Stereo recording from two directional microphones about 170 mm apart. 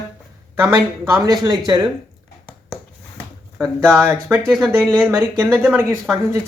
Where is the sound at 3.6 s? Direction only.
15° right (ahead or behind).